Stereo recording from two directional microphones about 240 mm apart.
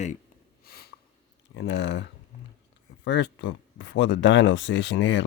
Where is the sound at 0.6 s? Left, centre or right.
Left.